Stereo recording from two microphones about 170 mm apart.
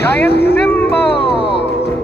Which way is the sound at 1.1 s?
30° left (ahead or behind).